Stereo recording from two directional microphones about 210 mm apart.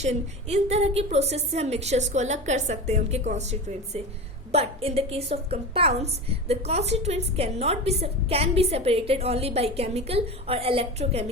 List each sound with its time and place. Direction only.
0.0 s a woman's voice: 30° right (ahead or behind)